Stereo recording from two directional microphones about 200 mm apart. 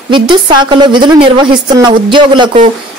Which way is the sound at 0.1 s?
25° right (ahead or behind).